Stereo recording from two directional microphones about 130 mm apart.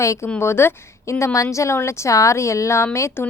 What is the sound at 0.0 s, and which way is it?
A woman's voice, 25° left (ahead or behind).